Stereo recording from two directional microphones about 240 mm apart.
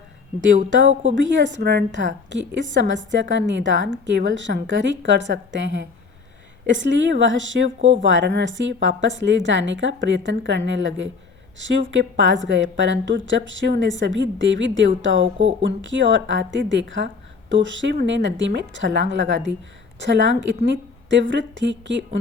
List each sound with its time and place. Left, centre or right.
0.4 s speech: right